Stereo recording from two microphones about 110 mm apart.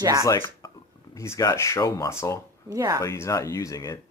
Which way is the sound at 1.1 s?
25° left (ahead or behind).